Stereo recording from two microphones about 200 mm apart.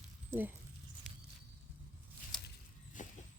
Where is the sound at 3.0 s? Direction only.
40° left (ahead or behind).